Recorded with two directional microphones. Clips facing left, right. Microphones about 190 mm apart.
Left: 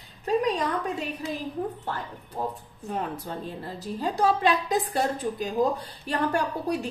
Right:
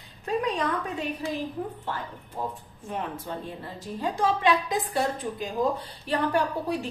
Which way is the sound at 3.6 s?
40° left (ahead or behind).